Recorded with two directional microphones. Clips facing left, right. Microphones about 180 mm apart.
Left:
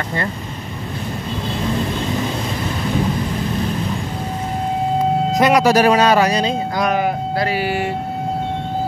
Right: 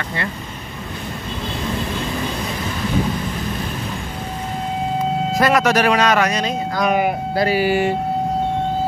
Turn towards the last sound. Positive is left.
turn(degrees=-30)  # may be behind; listen again after turning